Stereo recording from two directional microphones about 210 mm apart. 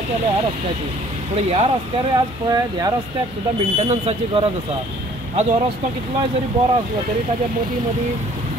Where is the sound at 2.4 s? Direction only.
20° right (ahead or behind).